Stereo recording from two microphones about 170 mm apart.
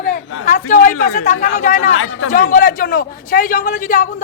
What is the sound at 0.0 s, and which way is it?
A man's voice, 50° left (ahead or behind).